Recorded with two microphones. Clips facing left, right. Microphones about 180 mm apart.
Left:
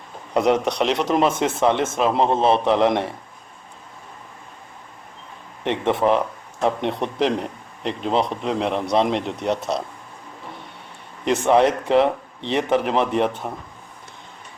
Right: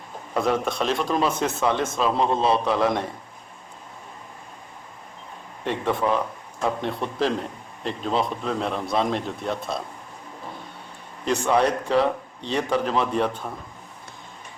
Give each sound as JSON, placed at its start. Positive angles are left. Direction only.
{"t": 0.3, "sound": "speech", "side_deg": 20}
{"t": 5.6, "sound": "speech", "side_deg": 20}
{"t": 11.3, "sound": "speech", "side_deg": 20}